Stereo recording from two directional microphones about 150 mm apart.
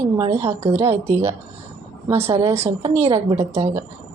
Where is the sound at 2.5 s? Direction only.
45° right (ahead or behind).